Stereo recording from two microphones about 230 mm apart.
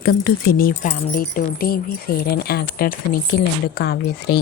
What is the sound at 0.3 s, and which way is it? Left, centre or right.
Speech, left.